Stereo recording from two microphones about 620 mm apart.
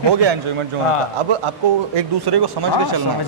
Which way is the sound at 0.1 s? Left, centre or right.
Right.